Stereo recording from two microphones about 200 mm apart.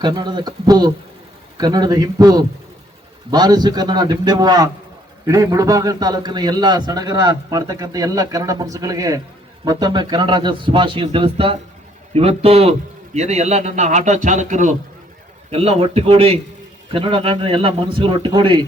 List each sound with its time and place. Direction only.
0.0 s a man's voice: 20° right (ahead or behind)